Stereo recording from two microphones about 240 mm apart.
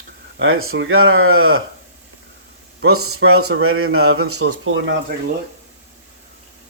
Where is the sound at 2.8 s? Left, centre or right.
Right.